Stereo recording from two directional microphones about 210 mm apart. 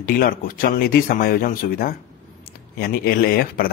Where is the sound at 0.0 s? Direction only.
45° left (ahead or behind).